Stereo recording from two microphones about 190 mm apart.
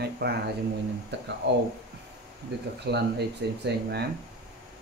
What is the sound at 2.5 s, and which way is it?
Speech, 60° right (ahead or behind).